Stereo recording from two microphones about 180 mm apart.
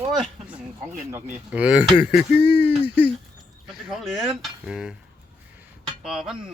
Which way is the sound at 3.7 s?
Centre (ahead or behind).